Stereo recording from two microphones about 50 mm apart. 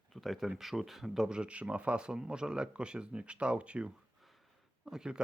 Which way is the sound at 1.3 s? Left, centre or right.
Right.